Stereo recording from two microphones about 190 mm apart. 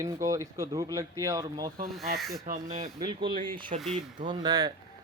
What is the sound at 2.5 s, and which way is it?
Speech, 35° right (ahead or behind).